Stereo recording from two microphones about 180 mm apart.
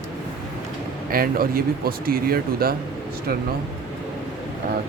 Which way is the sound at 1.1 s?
55° right (ahead or behind).